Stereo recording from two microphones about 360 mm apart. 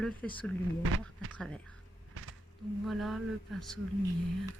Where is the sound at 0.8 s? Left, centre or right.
Right.